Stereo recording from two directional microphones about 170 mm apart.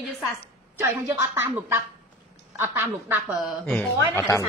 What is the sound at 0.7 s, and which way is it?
A woman's voice, 15° right (ahead or behind).